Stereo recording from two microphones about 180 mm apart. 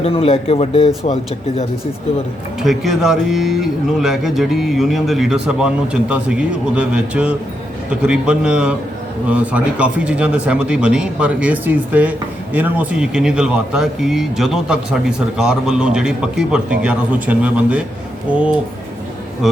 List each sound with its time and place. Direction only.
0.0 s speech: 30° left (ahead or behind)
2.6 s speech: centre (ahead or behind)